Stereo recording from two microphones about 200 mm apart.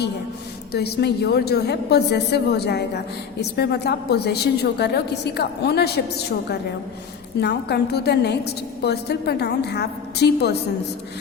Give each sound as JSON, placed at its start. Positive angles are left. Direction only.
{"t": 0.7, "sound": "a woman's voice", "side_deg": 55}